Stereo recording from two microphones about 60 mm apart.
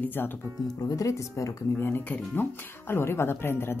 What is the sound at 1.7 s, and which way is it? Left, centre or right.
Speech, left.